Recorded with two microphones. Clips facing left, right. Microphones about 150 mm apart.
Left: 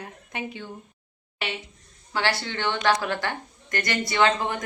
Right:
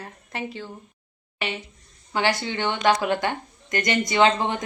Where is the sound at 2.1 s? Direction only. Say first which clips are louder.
Right 3 dB; 15° right (ahead or behind).